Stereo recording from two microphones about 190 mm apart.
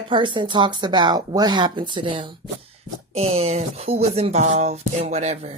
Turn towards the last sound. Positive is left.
turn(degrees=-35)  # may be behind; listen again after turning